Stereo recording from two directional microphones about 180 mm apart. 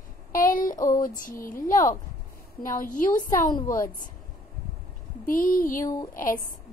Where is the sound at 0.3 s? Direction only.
50° left (ahead or behind).